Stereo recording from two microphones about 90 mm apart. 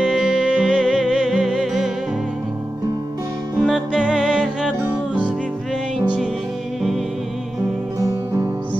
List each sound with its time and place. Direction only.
0.0 s music: 5° right (ahead or behind)
3.6 s music: 5° right (ahead or behind)
8.0 s music: 35° right (ahead or behind)